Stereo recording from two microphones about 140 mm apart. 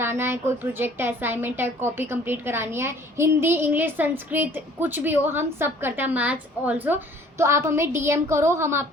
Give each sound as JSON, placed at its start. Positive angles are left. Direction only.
{"t": 0.0, "sound": "a woman's voice", "side_deg": -15}